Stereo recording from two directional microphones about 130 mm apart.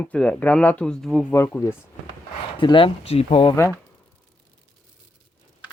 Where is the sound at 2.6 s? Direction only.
40° left (ahead or behind).